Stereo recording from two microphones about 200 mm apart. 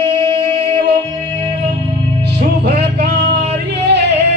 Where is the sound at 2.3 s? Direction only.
55° right (ahead or behind).